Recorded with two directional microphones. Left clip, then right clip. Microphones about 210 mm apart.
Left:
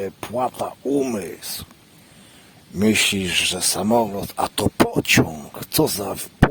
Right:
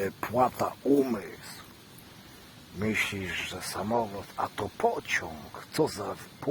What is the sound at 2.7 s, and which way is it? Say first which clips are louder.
Speech: left 11 dB; 45° left (ahead or behind).